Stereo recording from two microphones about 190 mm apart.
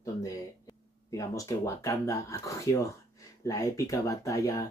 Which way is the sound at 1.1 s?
15° left (ahead or behind).